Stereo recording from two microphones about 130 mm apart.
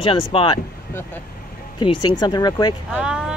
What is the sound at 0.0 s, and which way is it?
Speech, 45° left (ahead or behind).